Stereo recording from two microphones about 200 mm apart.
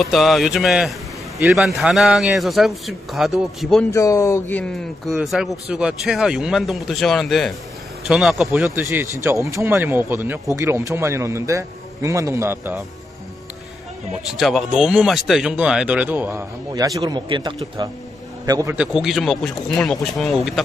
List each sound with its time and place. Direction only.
0.0 s a man's voice: centre (ahead or behind)
3.9 s a man's voice: 15° left (ahead or behind); by 12.8 s 10° right (ahead or behind)
14.3 s a man's voice: centre (ahead or behind)
18.8 s a man's voice: centre (ahead or behind)